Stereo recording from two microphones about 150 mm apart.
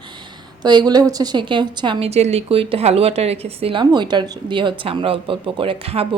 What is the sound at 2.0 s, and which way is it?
A woman's voice, 45° right (ahead or behind).